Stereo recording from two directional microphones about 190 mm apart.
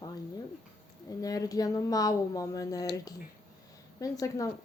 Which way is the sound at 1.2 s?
20° left (ahead or behind).